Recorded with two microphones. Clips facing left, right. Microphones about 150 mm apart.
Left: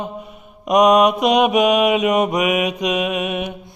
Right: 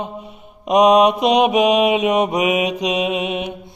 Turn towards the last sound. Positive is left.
turn(degrees=-25)  # may be behind; listen again after turning